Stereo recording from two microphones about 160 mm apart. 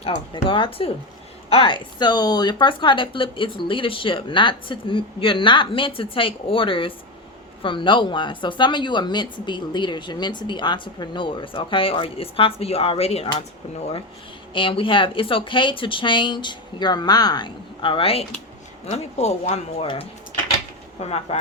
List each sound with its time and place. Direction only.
0.0 s speech: 30° left (ahead or behind)
14.5 s speech: 35° left (ahead or behind)